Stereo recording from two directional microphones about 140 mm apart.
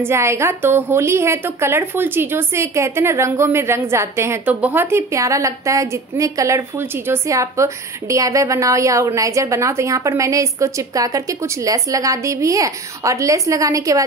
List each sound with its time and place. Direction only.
0.0 s a woman's voice: 20° right (ahead or behind)